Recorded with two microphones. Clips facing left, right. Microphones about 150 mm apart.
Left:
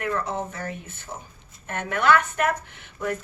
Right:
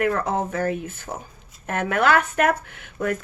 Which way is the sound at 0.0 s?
65° right (ahead or behind).